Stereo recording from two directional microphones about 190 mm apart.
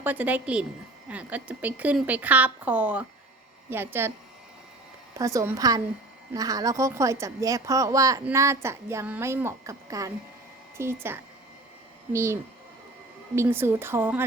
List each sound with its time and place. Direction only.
0.0 s speech: 10° right (ahead or behind)
5.1 s speech: 15° right (ahead or behind)